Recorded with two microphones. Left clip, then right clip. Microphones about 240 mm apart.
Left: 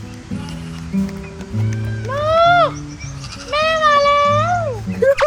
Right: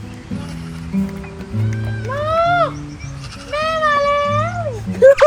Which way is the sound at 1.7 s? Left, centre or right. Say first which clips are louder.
Left 1 dB; centre.